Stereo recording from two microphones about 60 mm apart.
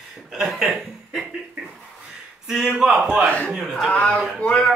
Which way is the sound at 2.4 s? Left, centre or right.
Centre.